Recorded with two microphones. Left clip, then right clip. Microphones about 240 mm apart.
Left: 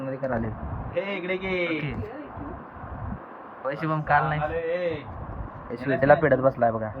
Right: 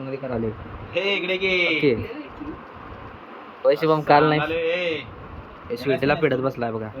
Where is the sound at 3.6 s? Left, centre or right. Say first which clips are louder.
Right 8 dB; right.